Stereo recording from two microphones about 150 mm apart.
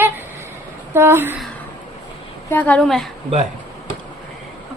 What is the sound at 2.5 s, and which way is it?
Speech, 10° left (ahead or behind).